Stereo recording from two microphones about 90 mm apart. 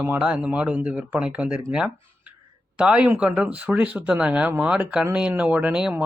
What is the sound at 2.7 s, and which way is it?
Speech, 10° right (ahead or behind).